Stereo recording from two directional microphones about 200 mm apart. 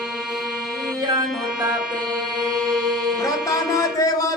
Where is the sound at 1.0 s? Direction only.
20° right (ahead or behind).